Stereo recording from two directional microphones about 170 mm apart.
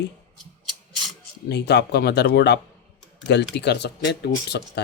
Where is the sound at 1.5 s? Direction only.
80° left.